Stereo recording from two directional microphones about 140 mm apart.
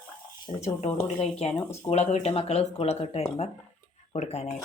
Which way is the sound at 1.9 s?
50° left (ahead or behind).